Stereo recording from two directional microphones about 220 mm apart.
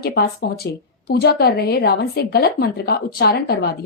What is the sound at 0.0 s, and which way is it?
A woman's voice, 45° left (ahead or behind).